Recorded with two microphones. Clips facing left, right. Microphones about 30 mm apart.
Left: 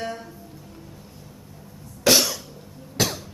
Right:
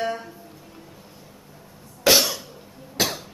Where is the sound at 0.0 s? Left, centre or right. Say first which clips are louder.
Right 4 dB; centre.